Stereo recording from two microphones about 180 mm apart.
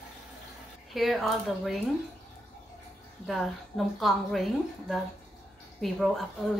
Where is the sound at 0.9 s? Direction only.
Centre (ahead or behind).